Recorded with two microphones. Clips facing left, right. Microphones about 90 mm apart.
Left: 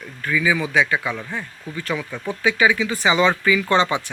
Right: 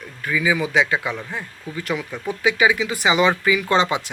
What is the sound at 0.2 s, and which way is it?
Speech, 15° right (ahead or behind).